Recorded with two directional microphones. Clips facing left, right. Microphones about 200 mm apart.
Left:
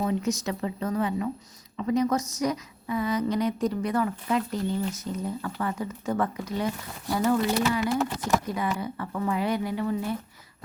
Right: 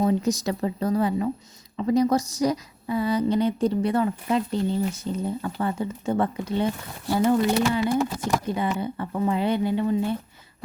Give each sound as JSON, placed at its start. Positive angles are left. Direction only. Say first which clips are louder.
{"t": 0.0, "sound": "a woman's voice", "louder": "right 4 dB", "side_deg": -35}